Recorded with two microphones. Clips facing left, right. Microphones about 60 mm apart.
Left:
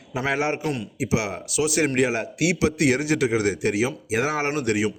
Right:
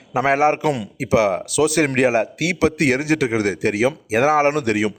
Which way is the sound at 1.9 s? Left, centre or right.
Right.